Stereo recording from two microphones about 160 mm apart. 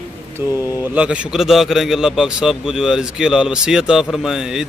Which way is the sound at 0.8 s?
10° right (ahead or behind).